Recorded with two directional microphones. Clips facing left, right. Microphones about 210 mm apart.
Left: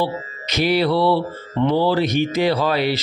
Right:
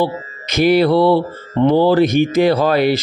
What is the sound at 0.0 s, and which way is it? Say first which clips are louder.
Speech: right 4 dB; 50° right (ahead or behind).